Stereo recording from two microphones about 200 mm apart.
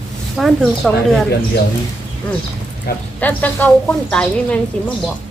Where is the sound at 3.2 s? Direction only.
10° left (ahead or behind).